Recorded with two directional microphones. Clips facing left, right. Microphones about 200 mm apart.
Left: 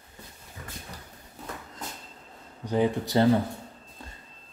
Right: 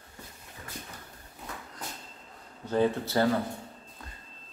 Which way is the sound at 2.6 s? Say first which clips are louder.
Left 1 dB; 15° left (ahead or behind).